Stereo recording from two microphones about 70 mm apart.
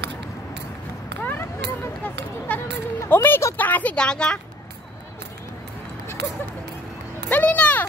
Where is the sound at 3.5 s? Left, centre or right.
Left.